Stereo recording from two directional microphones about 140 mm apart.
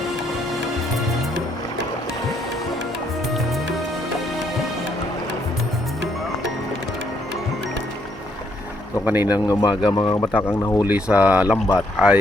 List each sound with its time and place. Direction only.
9.0 s speech: 15° right (ahead or behind)
9.5 s speech: 30° left (ahead or behind)
10.3 s speech: 20° left (ahead or behind)
10.8 s speech: 10° right (ahead or behind)